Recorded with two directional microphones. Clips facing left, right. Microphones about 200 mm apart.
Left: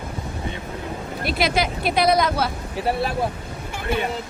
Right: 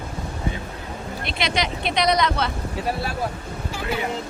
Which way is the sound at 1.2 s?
5° left (ahead or behind).